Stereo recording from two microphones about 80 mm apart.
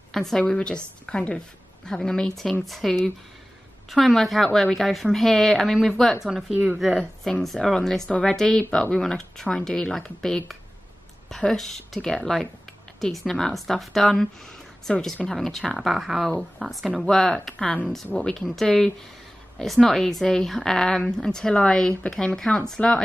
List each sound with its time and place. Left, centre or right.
0.1 s a woman's voice: centre
6.5 s speech: centre
7.0 s a woman's voice: centre
17.0 s a woman's voice: centre
18.0 s speech: centre
18.3 s a woman's voice: centre